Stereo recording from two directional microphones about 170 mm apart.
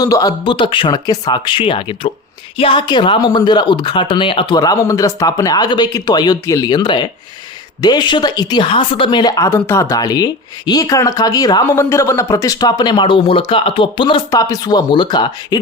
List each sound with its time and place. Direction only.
0.0 s speech: 20° left (ahead or behind)